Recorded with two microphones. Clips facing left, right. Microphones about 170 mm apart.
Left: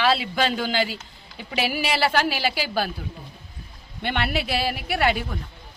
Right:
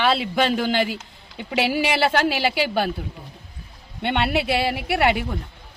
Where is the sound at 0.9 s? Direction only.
70° right (ahead or behind).